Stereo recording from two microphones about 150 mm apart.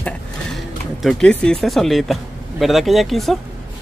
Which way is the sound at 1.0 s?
5° left (ahead or behind).